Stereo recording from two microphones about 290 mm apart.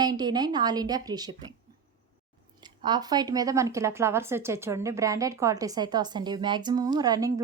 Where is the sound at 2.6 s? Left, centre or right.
Centre.